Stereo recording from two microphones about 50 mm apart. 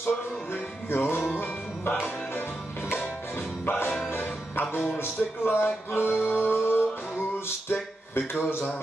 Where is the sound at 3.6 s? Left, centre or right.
Left.